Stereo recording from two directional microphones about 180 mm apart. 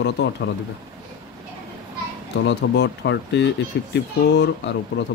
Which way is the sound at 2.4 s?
70° left (ahead or behind).